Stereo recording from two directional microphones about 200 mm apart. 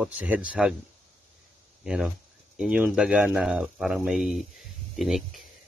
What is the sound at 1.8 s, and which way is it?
Speech, centre (ahead or behind).